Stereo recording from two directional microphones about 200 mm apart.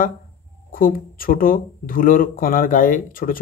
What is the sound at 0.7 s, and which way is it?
Speech, 45° left (ahead or behind).